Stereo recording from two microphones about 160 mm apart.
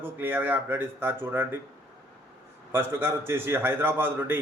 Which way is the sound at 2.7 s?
15° right (ahead or behind).